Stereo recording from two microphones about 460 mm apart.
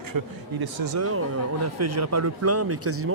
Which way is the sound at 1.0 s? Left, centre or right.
Right.